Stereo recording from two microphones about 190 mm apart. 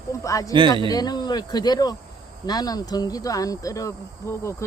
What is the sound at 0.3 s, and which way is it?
Speech, 15° left (ahead or behind).